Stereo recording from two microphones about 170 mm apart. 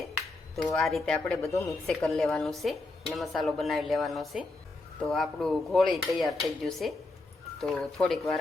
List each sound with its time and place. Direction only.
0.5 s speech: centre (ahead or behind)